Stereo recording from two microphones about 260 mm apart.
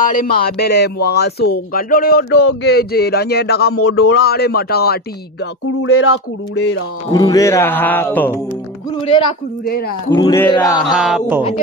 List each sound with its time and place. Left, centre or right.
0.0 s speech: left
2.3 s speech: left
3.7 s speech: left
4.2 s speech: left
5.8 s speech: left
6.5 s a sound: left
7.1 s speech: centre
9.0 s a man's voice: centre
10.8 s speech: centre